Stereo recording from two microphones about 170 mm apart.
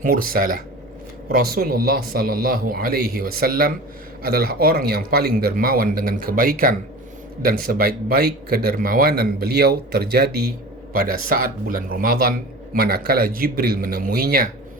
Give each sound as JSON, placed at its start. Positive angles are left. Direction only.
{"t": 0.0, "sound": "speech", "side_deg": -55}
{"t": 10.9, "sound": "speech", "side_deg": -55}